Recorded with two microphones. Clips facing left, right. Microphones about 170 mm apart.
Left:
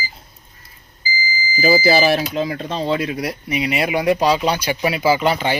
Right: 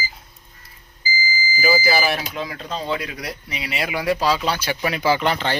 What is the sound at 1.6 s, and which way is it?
Speech, 30° left (ahead or behind).